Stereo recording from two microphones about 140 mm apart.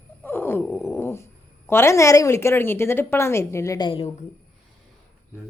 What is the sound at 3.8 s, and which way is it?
Speech, 35° left (ahead or behind).